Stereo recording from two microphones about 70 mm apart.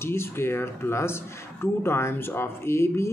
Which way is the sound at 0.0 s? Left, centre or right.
Left.